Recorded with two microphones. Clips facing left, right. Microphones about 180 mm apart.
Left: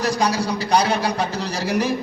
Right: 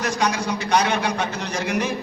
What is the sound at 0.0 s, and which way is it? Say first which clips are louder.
A man's voice: left 2 dB; 35° left (ahead or behind).